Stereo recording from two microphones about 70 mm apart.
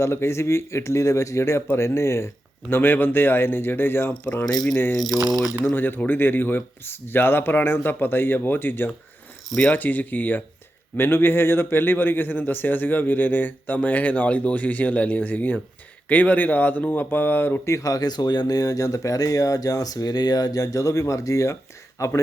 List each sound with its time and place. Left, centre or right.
0.0 s a man's voice: left
17.7 s speech: left